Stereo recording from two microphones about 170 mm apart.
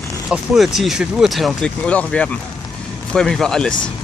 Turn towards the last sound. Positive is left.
turn(degrees=5)  # may be behind; listen again after turning